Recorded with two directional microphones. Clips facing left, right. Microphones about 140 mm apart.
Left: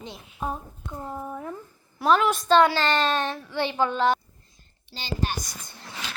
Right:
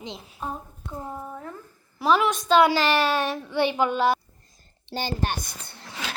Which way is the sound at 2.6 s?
10° right (ahead or behind).